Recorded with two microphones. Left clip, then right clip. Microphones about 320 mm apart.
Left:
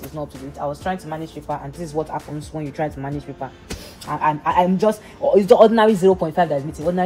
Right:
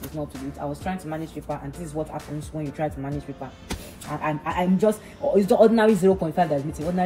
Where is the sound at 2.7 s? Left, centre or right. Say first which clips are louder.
Left 3 dB; left.